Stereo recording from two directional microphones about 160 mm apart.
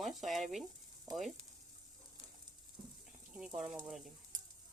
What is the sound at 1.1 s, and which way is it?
Frying, 25° right (ahead or behind).